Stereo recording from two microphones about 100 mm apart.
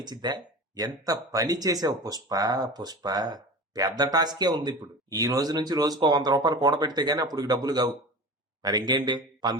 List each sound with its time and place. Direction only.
0.0 s speech: 45° right (ahead or behind)
8.9 s a man's voice: 50° right (ahead or behind)